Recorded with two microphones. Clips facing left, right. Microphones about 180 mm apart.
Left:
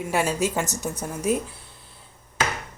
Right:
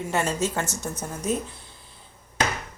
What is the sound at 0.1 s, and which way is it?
Speech, 10° left (ahead or behind).